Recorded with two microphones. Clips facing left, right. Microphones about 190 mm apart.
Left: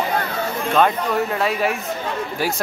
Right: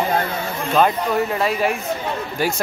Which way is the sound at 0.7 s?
Centre (ahead or behind).